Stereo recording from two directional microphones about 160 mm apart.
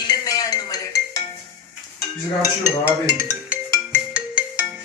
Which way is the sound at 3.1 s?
25° right (ahead or behind).